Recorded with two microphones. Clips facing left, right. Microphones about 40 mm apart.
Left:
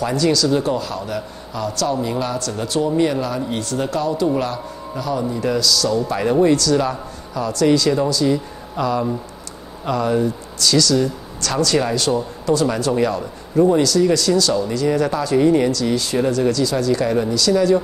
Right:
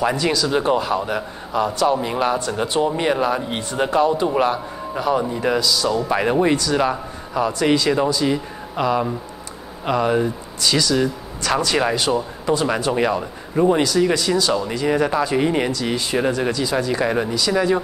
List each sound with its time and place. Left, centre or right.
0.0 s a man's voice: right